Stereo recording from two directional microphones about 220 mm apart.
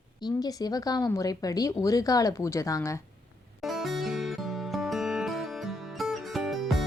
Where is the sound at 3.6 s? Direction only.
Centre (ahead or behind).